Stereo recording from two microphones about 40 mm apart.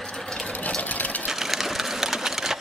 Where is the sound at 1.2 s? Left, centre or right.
Centre.